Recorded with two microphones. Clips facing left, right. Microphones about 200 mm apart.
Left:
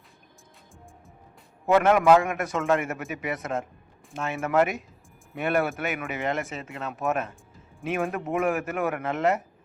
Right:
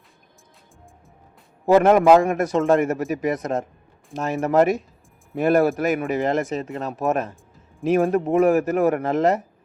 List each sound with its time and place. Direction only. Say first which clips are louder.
1.6 s a man's voice: right 5 dB; 35° right (ahead or behind)